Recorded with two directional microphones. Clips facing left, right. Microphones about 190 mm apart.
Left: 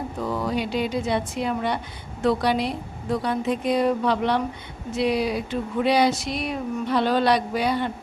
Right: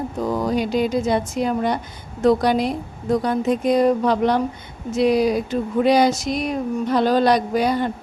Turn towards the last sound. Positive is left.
turn(degrees=-45)  # may be behind; listen again after turning